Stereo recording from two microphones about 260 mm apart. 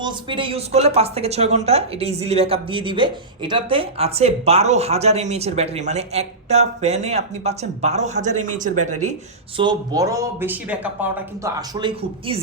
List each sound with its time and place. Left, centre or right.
0.0 s speech: centre
9.6 s speech: centre